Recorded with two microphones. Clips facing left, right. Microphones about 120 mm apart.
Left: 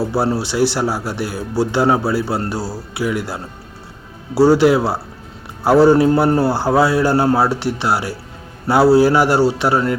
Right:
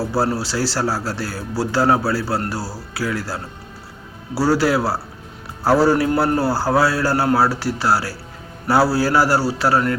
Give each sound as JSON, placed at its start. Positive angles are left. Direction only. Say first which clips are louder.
{"t": 0.1, "sound": "a man's voice", "louder": "left 2 dB", "side_deg": 20}